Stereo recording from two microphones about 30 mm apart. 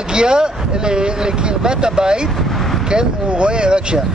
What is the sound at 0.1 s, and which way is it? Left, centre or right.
Speech, right.